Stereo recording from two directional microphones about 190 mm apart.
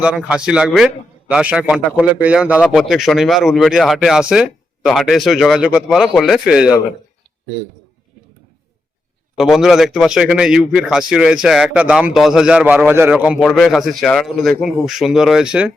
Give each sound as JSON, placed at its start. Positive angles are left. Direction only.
{"t": 0.0, "sound": "a man's voice", "side_deg": -5}
{"t": 9.4, "sound": "a man's voice", "side_deg": 0}